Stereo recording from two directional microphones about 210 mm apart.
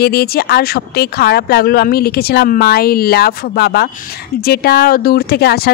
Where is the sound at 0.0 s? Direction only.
50° left (ahead or behind).